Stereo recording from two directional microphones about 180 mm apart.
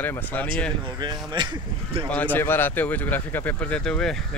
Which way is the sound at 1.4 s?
25° right (ahead or behind).